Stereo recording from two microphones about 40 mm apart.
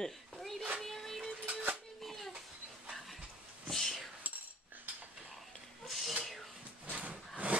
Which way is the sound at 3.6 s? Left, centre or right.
Centre.